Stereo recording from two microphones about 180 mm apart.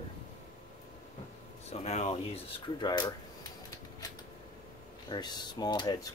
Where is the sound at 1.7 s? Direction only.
35° left (ahead or behind).